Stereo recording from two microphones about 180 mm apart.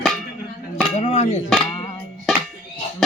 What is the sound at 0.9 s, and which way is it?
Speech, 40° left (ahead or behind).